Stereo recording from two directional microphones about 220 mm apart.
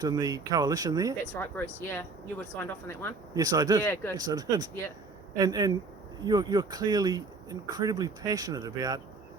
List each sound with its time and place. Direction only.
0.0 s speech: 15° right (ahead or behind)
1.4 s speech: 10° left (ahead or behind)
3.3 s speech: 15° right (ahead or behind)